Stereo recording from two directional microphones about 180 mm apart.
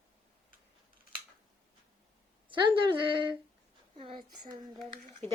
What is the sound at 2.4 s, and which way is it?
Speech, 30° right (ahead or behind).